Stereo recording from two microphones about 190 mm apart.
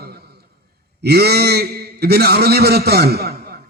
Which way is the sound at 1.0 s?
55° right (ahead or behind).